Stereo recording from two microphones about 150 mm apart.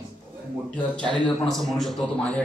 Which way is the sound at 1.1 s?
5° left (ahead or behind).